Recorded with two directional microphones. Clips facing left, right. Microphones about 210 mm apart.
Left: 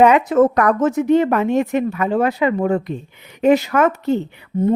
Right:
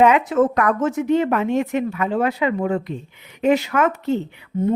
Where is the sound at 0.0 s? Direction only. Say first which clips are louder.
Left 3 dB; 40° left (ahead or behind).